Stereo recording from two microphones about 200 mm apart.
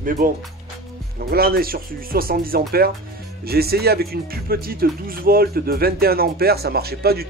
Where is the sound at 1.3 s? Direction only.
50° right (ahead or behind).